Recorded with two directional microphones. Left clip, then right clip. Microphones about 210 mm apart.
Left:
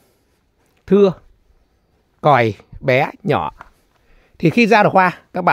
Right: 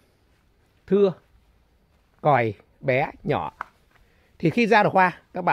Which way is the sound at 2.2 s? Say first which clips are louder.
Left 7 dB; 50° left (ahead or behind).